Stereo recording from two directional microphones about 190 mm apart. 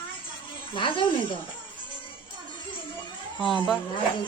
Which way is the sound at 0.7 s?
25° left (ahead or behind).